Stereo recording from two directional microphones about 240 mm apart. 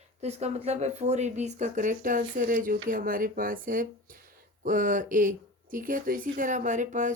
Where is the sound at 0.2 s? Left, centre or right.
Right.